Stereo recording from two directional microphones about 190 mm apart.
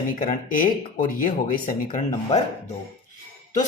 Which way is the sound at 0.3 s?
45° left (ahead or behind).